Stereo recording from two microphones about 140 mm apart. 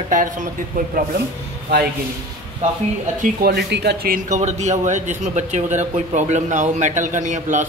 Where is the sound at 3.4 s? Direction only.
90° right.